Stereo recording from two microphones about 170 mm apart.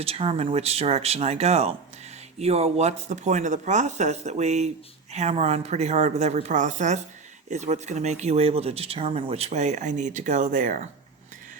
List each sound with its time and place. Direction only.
0.0 s speech: 35° right (ahead or behind)